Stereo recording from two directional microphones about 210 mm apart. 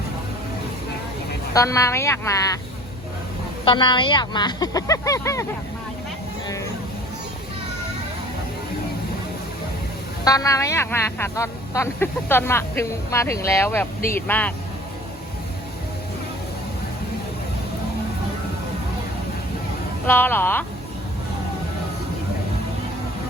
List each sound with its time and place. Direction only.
1.5 s speech: 15° left (ahead or behind)
3.7 s speech: 20° left (ahead or behind)
10.2 s speech: 15° left (ahead or behind)
20.1 s speech: 10° left (ahead or behind)